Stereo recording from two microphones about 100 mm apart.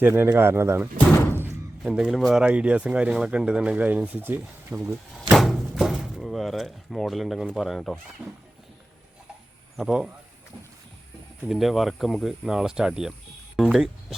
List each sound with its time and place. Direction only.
0.0 s speech: 20° right (ahead or behind)
0.9 s door: 20° left (ahead or behind)
1.8 s speech: 10° right (ahead or behind)
2.4 s speech: 10° right (ahead or behind)
5.3 s door: centre (ahead or behind)
8.2 s speech: 5° right (ahead or behind)
9.7 s speech: 5° right (ahead or behind)
11.4 s speech: centre (ahead or behind)